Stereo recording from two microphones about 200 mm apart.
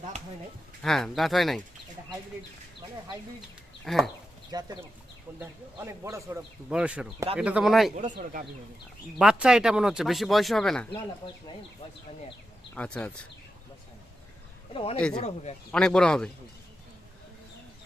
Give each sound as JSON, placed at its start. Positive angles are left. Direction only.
{"t": 0.8, "sound": "speech", "side_deg": 0}
{"t": 3.8, "sound": "speech", "side_deg": 0}
{"t": 4.5, "sound": "speech", "side_deg": -20}
{"t": 7.9, "sound": "speech", "side_deg": -40}
{"t": 9.1, "sound": "speech", "side_deg": -5}
{"t": 12.7, "sound": "speech", "side_deg": 5}
{"t": 14.7, "sound": "a man's voice", "side_deg": 25}
{"t": 15.7, "sound": "speech", "side_deg": 5}